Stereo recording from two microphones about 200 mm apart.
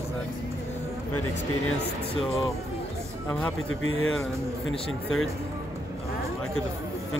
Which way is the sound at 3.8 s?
90° left.